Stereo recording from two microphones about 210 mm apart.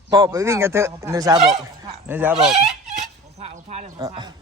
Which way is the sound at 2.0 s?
10° right (ahead or behind).